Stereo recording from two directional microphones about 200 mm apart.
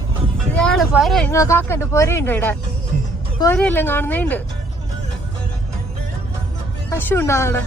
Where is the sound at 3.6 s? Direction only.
10° left (ahead or behind).